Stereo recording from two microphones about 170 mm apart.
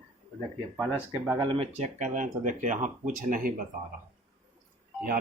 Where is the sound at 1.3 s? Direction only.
30° right (ahead or behind); by 3.5 s 50° right (ahead or behind).